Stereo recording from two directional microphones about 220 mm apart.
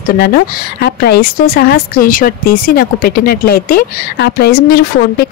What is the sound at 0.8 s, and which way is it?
Speech, 45° left (ahead or behind).